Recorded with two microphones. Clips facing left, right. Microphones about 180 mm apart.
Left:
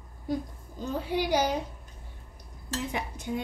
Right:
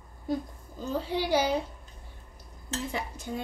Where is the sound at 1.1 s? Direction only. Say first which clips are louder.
Even; 15° left (ahead or behind).